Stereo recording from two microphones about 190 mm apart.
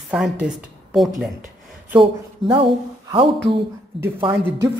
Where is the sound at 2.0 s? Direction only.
25° right (ahead or behind).